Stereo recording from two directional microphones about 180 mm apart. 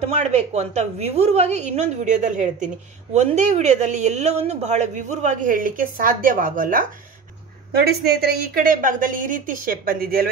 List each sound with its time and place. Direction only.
0.0 s a woman's voice: 40° right (ahead or behind)
7.8 s speech: 60° right (ahead or behind)